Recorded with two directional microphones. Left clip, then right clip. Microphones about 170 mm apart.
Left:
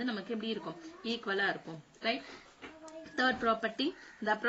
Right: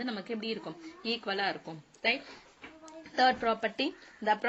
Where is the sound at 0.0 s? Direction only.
25° right (ahead or behind).